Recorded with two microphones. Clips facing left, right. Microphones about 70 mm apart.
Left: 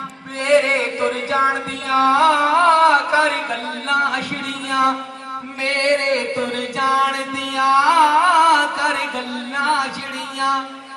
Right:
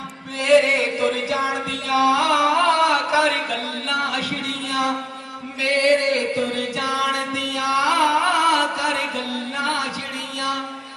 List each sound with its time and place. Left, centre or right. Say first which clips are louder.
0.4 s music: even; left